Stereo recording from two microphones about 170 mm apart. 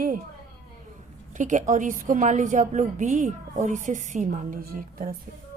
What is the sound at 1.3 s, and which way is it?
A woman's voice, 50° right (ahead or behind).